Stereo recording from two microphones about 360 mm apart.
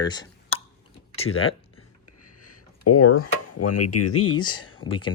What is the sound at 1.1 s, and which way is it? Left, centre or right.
Speech, centre.